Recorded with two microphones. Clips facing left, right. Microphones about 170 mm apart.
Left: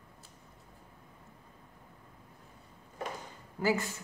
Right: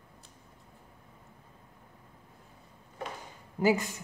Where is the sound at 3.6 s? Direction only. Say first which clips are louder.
Right 4 dB; 20° right (ahead or behind).